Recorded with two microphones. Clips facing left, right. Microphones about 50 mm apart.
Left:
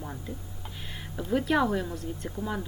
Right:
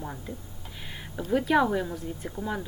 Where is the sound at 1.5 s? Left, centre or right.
Centre.